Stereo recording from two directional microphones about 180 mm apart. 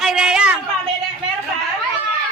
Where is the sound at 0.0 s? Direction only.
5° right (ahead or behind).